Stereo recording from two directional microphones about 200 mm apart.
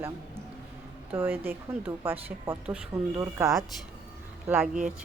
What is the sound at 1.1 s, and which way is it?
A woman's voice, 10° right (ahead or behind).